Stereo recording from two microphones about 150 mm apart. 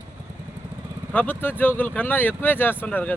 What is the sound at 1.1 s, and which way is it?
Speech, 10° left (ahead or behind).